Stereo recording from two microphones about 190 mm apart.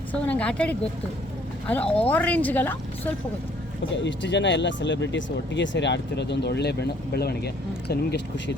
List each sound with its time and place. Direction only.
0.1 s speech: 5° left (ahead or behind)
3.9 s speech: 70° left (ahead or behind)